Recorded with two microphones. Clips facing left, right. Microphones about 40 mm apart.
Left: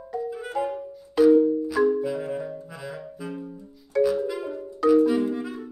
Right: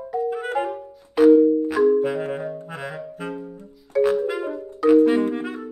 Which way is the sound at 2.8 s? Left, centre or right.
Right.